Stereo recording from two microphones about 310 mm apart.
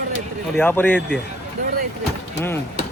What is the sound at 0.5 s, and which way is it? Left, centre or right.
Speech, centre.